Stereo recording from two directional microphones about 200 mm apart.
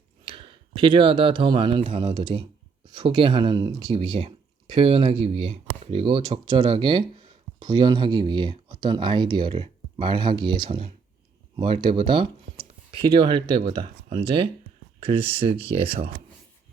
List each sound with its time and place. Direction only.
0.3 s speech: 25° right (ahead or behind)
3.9 s speech: 30° right (ahead or behind)